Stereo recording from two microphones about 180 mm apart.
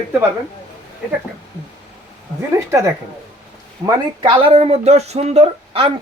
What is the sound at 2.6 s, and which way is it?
Speech, 20° right (ahead or behind).